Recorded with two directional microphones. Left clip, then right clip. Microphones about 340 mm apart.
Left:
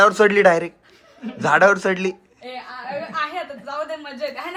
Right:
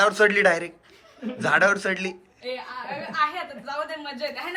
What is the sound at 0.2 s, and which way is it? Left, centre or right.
Speech, centre.